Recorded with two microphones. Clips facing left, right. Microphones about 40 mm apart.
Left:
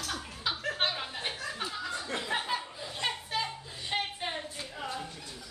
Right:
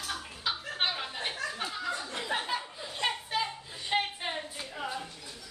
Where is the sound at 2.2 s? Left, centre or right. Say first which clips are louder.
Even; centre.